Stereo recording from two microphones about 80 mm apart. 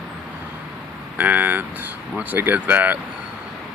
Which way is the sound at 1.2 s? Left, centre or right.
Right.